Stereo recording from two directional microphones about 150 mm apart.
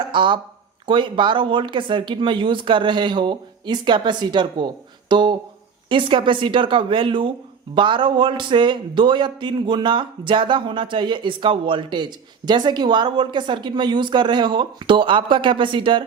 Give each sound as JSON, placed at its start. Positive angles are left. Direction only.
{"t": 0.1, "sound": "a man's voice", "side_deg": -35}